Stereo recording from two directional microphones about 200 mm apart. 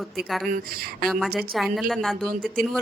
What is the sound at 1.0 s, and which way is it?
Speech, 50° right (ahead or behind).